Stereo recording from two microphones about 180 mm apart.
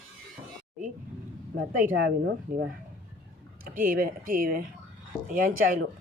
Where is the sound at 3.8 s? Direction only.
50° right (ahead or behind).